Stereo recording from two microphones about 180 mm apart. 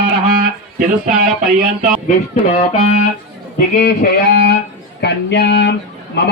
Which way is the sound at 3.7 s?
55° left (ahead or behind).